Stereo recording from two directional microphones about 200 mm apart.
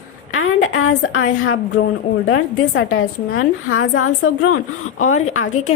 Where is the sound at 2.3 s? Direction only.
80° left.